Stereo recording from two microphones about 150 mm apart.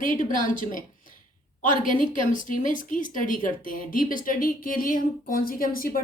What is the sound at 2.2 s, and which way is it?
Speech, 60° left (ahead or behind).